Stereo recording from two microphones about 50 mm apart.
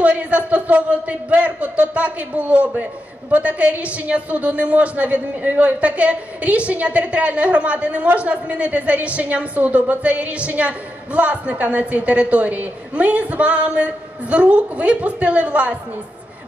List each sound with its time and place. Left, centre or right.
0.0 s a man's voice: right